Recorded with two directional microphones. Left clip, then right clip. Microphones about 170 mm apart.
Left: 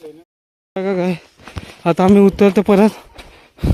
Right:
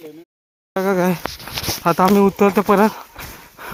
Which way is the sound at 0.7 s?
15° left (ahead or behind).